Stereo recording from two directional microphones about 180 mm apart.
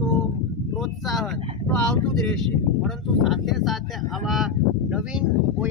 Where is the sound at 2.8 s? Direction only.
Centre (ahead or behind).